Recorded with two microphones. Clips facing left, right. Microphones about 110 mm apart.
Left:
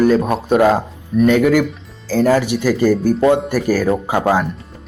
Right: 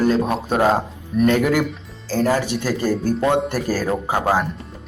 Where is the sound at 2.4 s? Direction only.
15° left (ahead or behind).